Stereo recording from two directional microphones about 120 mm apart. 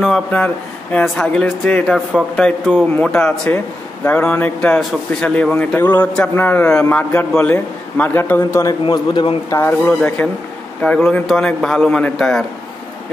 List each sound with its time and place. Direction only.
0.0 s a man's voice: 5° left (ahead or behind)
8.8 s a man's voice: 40° left (ahead or behind)
9.5 s a man's voice: 20° left (ahead or behind)